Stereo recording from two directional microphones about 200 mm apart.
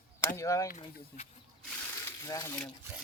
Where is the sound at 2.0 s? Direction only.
15° left (ahead or behind).